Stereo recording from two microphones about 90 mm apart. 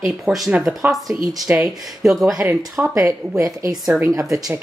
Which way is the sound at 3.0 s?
35° right (ahead or behind).